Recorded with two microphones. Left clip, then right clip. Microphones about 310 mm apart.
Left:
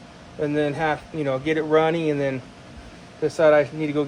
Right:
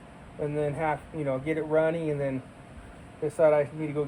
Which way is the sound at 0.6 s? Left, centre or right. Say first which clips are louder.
Left 5 dB; left.